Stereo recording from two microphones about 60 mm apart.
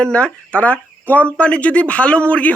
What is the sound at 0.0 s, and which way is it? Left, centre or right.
Speech, centre.